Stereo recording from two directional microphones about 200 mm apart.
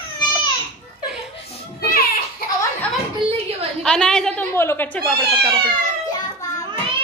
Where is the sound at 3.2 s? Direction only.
25° right (ahead or behind).